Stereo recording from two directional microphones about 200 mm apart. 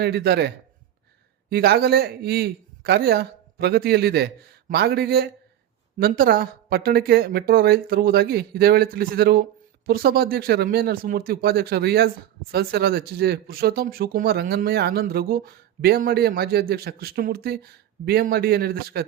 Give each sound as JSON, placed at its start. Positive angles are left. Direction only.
{"t": 0.0, "sound": "a man's voice", "side_deg": -55}